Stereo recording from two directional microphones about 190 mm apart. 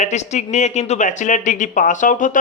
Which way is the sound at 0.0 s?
35° left (ahead or behind).